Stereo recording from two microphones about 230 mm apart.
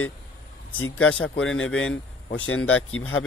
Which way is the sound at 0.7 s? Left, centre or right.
Left.